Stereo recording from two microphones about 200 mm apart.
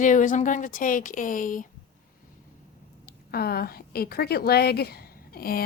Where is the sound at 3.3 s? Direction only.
50° left (ahead or behind).